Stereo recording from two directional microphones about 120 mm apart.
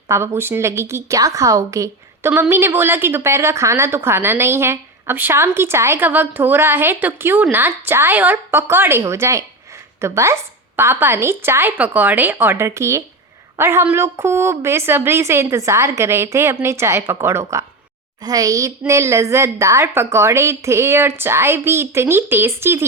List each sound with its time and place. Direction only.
0.1 s a woman's voice: 20° right (ahead or behind)